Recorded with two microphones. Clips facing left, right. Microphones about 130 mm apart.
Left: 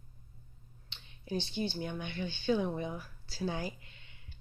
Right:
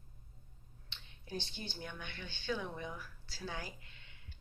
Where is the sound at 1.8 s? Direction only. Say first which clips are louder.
Left 9 dB; 20° left (ahead or behind).